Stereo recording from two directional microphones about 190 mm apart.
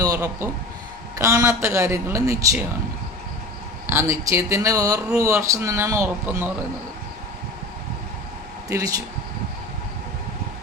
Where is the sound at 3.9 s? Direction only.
15° right (ahead or behind).